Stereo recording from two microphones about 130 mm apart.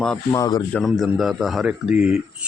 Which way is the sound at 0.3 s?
30° left (ahead or behind).